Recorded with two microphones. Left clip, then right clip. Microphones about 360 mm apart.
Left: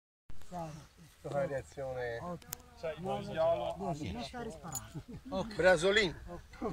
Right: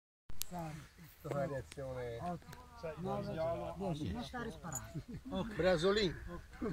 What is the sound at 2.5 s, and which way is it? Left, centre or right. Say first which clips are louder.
Speech: left 5 dB; left.